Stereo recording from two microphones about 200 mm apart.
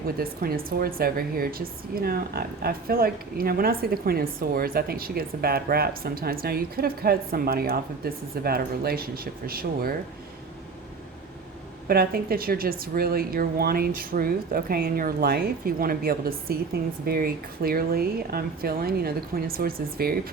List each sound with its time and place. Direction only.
0.2 s a woman's voice: 50° right (ahead or behind)
11.9 s a woman's voice: 50° right (ahead or behind)